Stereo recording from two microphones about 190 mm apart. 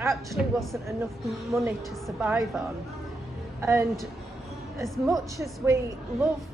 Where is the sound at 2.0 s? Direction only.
5° right (ahead or behind).